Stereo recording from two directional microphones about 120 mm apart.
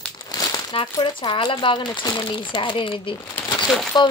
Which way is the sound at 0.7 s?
45° left (ahead or behind).